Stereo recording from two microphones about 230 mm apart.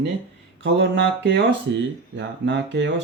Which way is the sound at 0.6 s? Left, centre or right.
Right.